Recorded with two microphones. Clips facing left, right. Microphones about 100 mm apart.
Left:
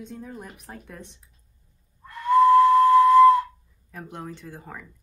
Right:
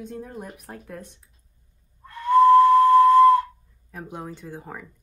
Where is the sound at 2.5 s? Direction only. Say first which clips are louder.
Right 2 dB; 20° right (ahead or behind).